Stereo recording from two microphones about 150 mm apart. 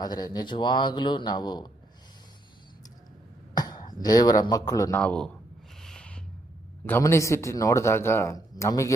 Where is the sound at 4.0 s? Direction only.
25° left (ahead or behind).